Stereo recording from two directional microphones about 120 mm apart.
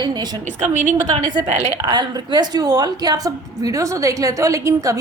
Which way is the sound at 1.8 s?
35° right (ahead or behind).